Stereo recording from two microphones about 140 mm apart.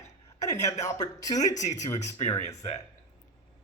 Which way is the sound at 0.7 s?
55° left (ahead or behind).